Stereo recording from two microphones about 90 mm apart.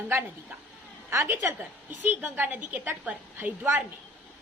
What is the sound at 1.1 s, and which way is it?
A woman's voice, 25° right (ahead or behind).